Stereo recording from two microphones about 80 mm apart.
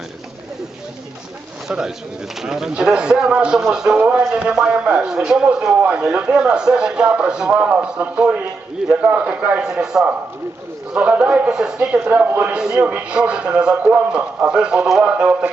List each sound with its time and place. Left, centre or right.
1.6 s a man's voice: centre
9.6 s speech: centre
12.0 s a man's voice: right